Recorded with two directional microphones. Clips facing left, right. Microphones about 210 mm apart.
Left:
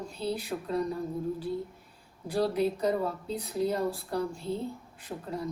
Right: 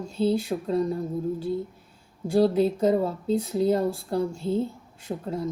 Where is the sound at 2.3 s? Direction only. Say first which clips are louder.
Right 7 dB; 25° right (ahead or behind).